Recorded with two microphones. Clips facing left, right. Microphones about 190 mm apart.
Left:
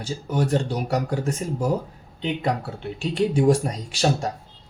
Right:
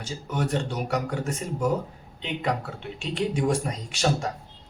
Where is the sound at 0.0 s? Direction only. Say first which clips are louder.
Left 4 dB; 35° left (ahead or behind).